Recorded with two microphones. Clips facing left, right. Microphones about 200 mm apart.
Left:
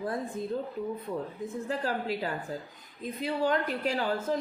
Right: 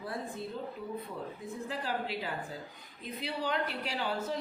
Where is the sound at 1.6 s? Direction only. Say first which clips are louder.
Left 4 dB; 45° left (ahead or behind).